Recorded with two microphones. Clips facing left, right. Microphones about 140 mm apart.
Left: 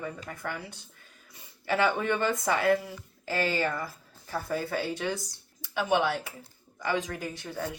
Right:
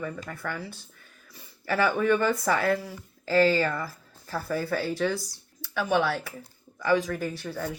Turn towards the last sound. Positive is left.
turn(degrees=20)  # may be behind; listen again after turning